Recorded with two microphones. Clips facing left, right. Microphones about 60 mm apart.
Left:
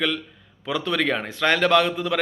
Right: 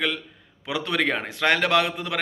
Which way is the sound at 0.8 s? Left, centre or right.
Right.